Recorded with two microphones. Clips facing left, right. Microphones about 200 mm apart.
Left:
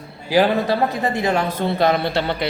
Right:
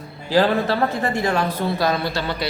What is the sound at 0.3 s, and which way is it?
A man's voice, 15° left (ahead or behind).